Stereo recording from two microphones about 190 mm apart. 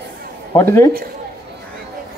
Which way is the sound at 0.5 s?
15° left (ahead or behind).